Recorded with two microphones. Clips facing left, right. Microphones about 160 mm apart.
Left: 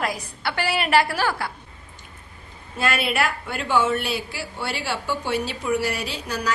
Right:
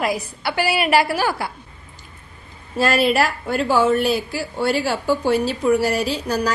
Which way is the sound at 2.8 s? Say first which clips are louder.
Right 6 dB; 35° right (ahead or behind).